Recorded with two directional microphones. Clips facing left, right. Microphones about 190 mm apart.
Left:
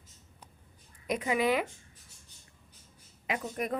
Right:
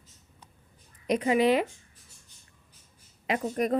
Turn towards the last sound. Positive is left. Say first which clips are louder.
# right 6 dB
turn(degrees=-40)  # may be behind; listen again after turning